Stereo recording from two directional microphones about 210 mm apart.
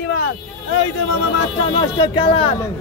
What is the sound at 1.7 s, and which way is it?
Speech, 20° left (ahead or behind).